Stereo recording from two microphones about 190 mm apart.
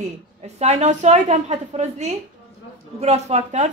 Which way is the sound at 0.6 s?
35° right (ahead or behind).